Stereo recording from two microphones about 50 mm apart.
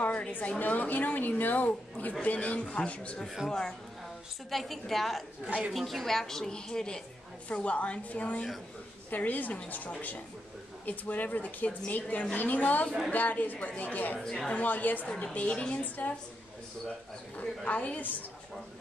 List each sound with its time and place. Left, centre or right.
0.0 s a woman's voice: left
3.4 s a woman's voice: centre
7.4 s a woman's voice: left
14.2 s a woman's voice: centre
14.5 s a woman's voice: left
17.6 s a woman's voice: left